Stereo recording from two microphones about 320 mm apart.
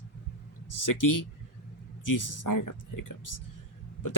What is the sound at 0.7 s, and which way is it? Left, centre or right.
Speech, left.